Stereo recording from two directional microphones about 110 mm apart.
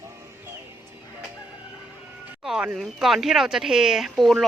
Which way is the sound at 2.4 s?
10° right (ahead or behind).